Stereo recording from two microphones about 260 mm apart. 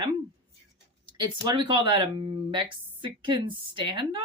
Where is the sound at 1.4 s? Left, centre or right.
Centre.